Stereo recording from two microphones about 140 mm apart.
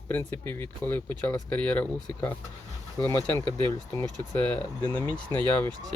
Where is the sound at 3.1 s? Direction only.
20° left (ahead or behind).